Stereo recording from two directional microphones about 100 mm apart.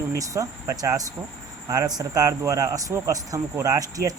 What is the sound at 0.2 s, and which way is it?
Speech, 35° right (ahead or behind).